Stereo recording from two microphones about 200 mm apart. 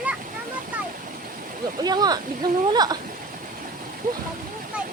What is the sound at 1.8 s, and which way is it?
Speech, 20° right (ahead or behind).